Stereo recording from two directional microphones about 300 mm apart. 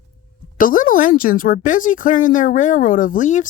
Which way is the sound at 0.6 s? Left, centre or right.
Left.